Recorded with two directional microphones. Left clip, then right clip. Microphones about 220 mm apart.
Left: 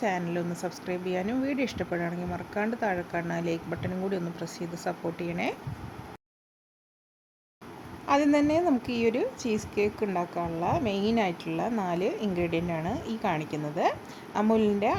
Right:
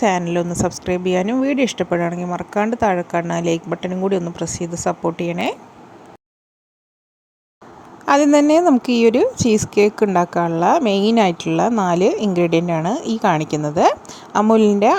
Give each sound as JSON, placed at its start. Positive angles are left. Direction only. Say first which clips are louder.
{"t": 0.0, "sound": "a woman's voice", "louder": "right 12 dB", "side_deg": -35}
{"t": 8.0, "sound": "a woman's voice", "louder": "right 11 dB", "side_deg": -40}